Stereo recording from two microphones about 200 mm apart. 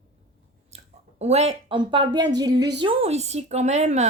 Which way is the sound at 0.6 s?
35° right (ahead or behind).